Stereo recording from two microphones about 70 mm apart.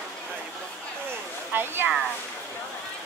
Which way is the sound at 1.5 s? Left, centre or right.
Right.